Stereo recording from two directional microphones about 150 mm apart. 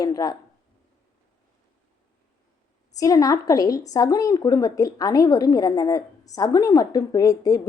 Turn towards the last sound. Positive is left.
turn(degrees=20)  # may be behind; listen again after turning